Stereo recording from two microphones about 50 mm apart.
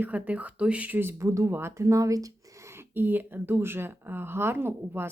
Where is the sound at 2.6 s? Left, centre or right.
Right.